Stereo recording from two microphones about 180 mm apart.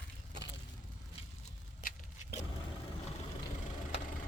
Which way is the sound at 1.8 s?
50° left (ahead or behind).